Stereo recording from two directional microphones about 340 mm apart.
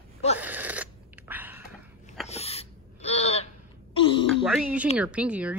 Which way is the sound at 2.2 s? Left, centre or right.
Centre.